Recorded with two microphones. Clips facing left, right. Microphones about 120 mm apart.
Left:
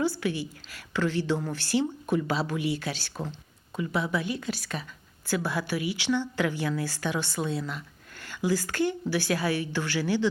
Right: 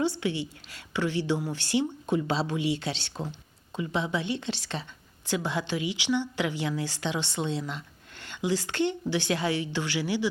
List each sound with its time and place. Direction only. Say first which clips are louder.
0.0 s a woman's voice: even; 20° right (ahead or behind)